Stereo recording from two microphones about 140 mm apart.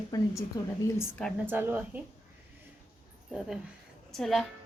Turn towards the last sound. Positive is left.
turn(degrees=0)  # may be behind; listen again after turning